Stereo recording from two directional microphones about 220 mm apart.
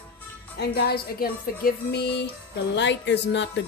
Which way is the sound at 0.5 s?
50° left (ahead or behind).